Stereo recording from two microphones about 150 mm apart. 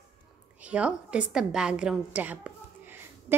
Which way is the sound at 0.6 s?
10° right (ahead or behind).